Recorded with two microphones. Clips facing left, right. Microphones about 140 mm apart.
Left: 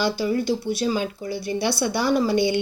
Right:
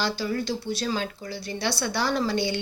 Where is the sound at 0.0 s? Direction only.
15° left (ahead or behind).